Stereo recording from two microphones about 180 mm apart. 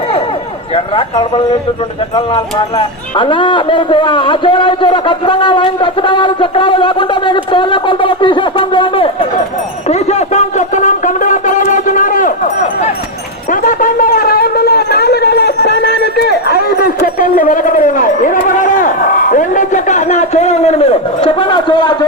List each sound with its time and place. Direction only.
0.9 s a man's voice: 30° left (ahead or behind)
9.9 s a sound: 40° left (ahead or behind)
13.5 s shofar: 50° left (ahead or behind); by 21.9 s 25° left (ahead or behind)